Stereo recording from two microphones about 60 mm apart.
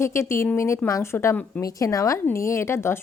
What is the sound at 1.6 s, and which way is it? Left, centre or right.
Speech, left.